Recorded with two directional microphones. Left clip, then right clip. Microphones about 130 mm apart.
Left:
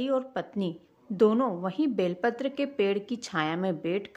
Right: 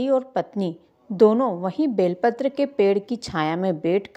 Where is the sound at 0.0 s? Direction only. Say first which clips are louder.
Right 7 dB; 35° right (ahead or behind).